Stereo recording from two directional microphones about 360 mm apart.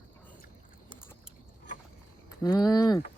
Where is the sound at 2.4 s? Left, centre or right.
Centre.